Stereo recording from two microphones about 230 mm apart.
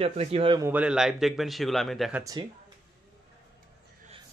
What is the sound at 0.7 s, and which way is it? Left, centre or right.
Speech, centre.